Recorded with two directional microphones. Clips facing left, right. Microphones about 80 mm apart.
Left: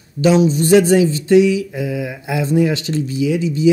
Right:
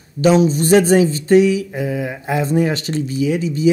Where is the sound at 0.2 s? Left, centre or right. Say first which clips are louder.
Even; right.